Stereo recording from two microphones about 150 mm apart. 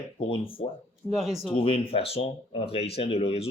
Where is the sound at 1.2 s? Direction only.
Centre (ahead or behind).